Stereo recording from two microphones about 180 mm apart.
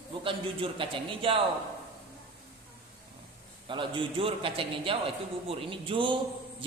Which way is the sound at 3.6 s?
30° right (ahead or behind).